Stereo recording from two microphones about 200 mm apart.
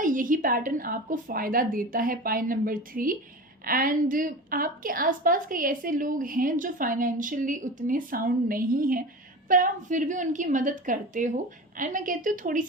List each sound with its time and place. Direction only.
0.0 s a woman's voice: 40° right (ahead or behind)